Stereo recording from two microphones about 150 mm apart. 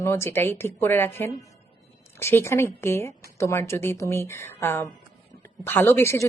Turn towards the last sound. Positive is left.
turn(degrees=15)  # may be behind; listen again after turning